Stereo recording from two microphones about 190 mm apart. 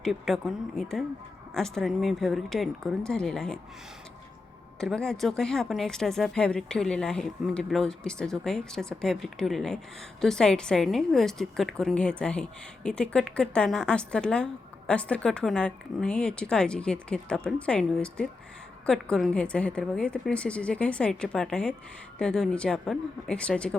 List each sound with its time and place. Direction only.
0.0 s a woman's voice: centre (ahead or behind)
4.8 s a woman's voice: 5° left (ahead or behind)